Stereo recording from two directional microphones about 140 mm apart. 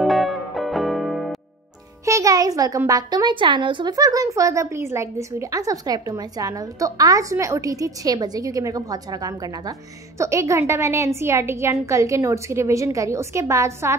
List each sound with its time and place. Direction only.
0.0 s music: centre (ahead or behind)
2.0 s music: 20° right (ahead or behind)
2.9 s speech: 25° right (ahead or behind)